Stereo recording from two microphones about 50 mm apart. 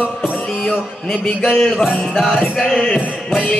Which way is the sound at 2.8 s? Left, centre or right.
Centre.